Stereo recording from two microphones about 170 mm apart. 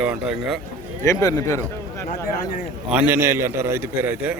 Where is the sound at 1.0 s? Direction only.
20° left (ahead or behind).